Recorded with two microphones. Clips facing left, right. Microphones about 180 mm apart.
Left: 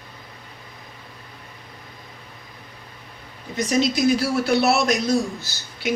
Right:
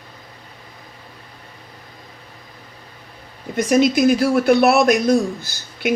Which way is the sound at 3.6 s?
55° right (ahead or behind).